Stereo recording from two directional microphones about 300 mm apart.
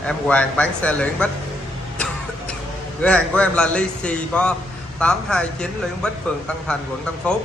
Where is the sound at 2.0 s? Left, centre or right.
Centre.